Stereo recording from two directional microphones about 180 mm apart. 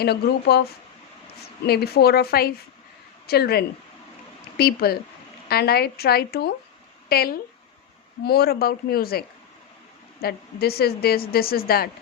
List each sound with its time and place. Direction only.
0.0 s a woman's voice: 65° left (ahead or behind)